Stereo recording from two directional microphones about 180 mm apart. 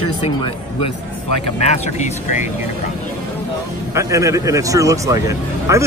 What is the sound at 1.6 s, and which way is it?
Speech, 40° left (ahead or behind).